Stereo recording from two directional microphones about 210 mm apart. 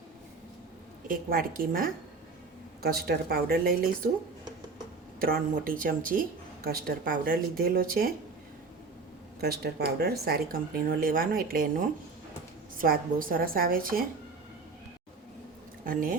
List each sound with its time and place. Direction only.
1.0 s speech: 40° right (ahead or behind)
5.2 s a woman's voice: 40° right (ahead or behind)
9.4 s speech: 50° right (ahead or behind)
12.7 s speech: 40° right (ahead or behind)
15.8 s speech: 40° right (ahead or behind)